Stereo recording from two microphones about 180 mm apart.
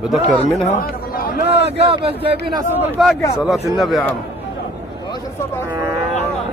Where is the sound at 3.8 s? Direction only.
Centre (ahead or behind).